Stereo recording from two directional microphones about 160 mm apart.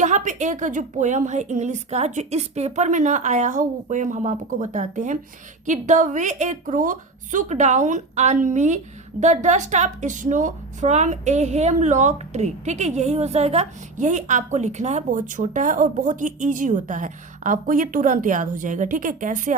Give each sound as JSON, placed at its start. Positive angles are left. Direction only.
{"t": 0.0, "sound": "a woman's voice", "side_deg": -50}